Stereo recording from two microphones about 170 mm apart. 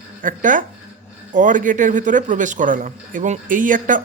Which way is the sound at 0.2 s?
50° right (ahead or behind).